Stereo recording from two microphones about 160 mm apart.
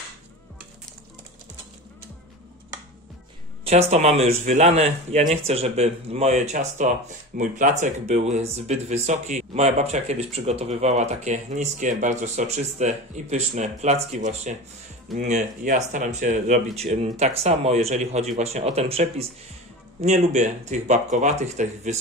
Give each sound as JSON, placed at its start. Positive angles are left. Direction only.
{"t": 3.6, "sound": "speech", "side_deg": -40}